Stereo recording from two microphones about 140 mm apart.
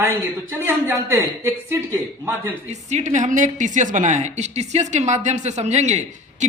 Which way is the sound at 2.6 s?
55° right (ahead or behind).